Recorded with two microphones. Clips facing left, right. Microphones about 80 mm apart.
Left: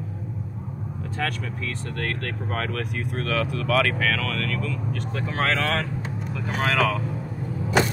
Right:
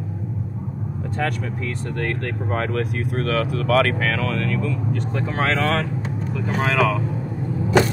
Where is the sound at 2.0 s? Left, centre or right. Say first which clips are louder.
Right 4 dB; centre.